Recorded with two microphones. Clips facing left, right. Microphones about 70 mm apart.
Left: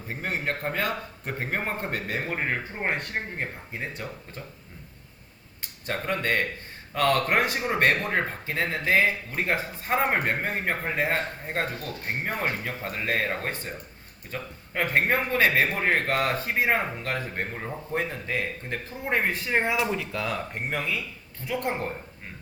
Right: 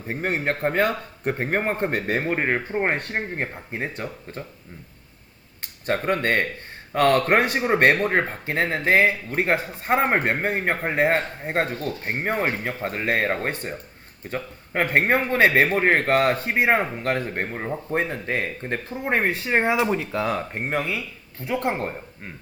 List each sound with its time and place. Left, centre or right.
0.1 s a man's voice: right
5.8 s a man's voice: right